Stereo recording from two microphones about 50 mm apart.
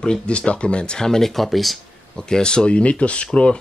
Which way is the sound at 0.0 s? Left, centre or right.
Centre.